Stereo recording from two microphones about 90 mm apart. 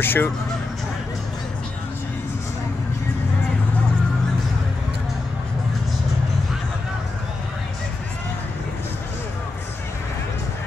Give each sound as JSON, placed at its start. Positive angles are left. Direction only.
{"t": 0.0, "sound": "speech", "side_deg": 25}